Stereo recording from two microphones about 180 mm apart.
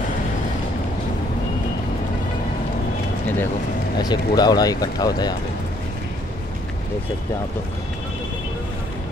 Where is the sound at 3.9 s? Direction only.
25° left (ahead or behind).